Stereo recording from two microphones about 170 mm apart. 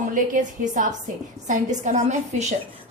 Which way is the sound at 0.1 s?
50° right (ahead or behind).